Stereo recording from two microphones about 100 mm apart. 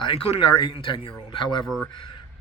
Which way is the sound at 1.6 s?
Centre (ahead or behind).